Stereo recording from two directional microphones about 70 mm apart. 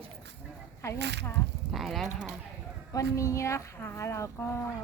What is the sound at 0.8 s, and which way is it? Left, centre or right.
Speech, left.